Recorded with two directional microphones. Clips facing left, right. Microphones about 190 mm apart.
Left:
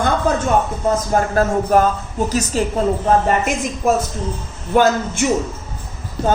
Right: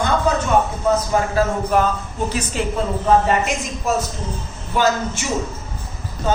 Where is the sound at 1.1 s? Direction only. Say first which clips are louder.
Left 2 dB; 50° left (ahead or behind).